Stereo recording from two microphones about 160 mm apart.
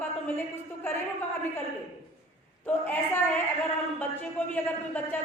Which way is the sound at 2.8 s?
10° left (ahead or behind).